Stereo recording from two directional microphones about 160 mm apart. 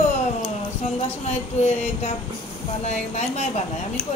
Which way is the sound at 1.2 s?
45° left (ahead or behind).